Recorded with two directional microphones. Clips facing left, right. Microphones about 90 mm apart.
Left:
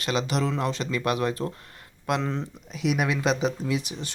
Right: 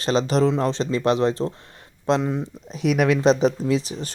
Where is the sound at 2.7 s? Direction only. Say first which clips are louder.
Right 6 dB; 35° right (ahead or behind).